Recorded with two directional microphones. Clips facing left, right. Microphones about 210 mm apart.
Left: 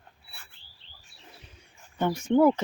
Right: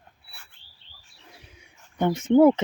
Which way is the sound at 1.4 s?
10° right (ahead or behind).